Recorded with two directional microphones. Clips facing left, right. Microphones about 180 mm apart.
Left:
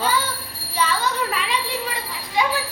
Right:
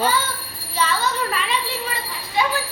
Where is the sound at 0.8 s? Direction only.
10° left (ahead or behind).